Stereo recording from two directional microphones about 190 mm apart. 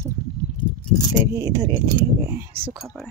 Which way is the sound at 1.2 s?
20° right (ahead or behind).